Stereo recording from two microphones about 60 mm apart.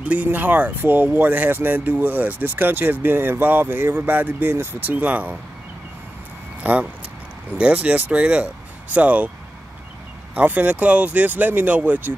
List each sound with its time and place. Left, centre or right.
0.1 s speech: right
6.6 s speech: right
10.3 s speech: right